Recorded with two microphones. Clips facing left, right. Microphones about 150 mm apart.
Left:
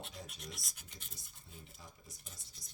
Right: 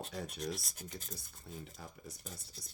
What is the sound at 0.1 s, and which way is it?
Speech, 70° right (ahead or behind).